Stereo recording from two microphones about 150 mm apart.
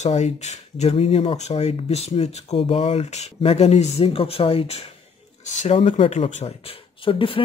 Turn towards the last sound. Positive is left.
turn(degrees=35)  # may be behind; listen again after turning